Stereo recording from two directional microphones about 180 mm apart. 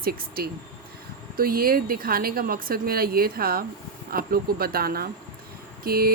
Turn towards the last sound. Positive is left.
turn(degrees=-55)  # may be behind; listen again after turning